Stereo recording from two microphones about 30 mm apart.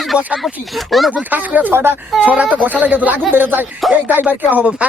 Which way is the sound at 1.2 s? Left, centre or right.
Right.